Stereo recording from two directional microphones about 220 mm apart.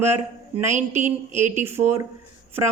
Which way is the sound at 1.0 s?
35° right (ahead or behind).